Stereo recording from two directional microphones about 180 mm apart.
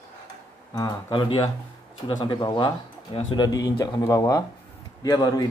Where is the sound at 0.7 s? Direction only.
20° left (ahead or behind).